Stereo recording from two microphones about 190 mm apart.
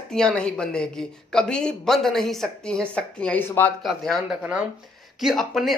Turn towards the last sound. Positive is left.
turn(degrees=0)  # may be behind; listen again after turning